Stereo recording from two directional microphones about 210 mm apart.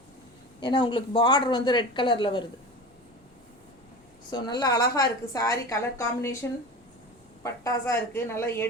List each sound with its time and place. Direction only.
0.6 s speech: 20° left (ahead or behind)
4.3 s a woman's voice: 20° left (ahead or behind)
7.4 s a woman's voice: 15° left (ahead or behind)